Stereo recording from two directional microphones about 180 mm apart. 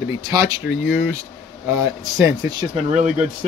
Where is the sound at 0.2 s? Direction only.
20° right (ahead or behind).